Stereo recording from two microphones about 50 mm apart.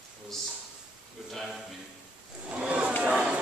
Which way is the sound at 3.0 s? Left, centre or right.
Right.